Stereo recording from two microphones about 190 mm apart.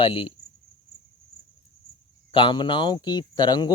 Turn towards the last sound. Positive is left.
turn(degrees=20)  # may be behind; listen again after turning